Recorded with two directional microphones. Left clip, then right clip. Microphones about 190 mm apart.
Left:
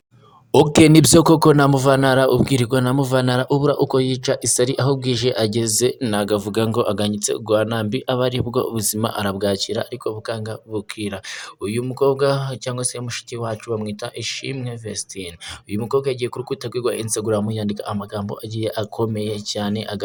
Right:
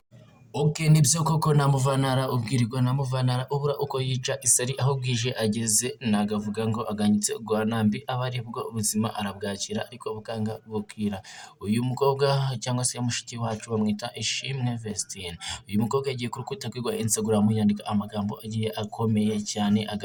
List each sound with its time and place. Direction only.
0.5 s a man's voice: 50° left (ahead or behind); by 10.5 s 20° left (ahead or behind)
11.6 s speech: 15° left (ahead or behind)